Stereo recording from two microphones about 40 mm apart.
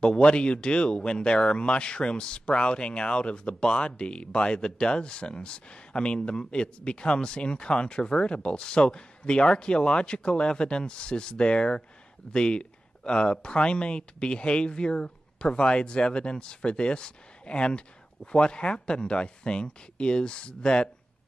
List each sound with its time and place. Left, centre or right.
0.0 s speech: left